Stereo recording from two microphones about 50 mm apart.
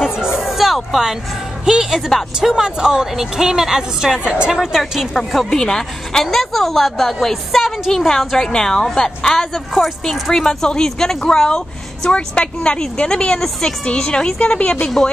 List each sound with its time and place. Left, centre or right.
0.0 s a sound: centre
1.7 s a woman's voice: centre
4.6 s a woman's voice: centre
9.5 s a woman's voice: centre; by 14.9 s left